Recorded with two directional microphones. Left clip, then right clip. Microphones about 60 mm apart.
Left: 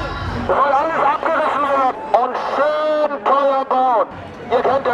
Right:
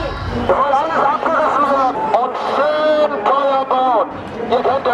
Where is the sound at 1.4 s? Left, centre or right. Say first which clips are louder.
Right 2 dB; centre.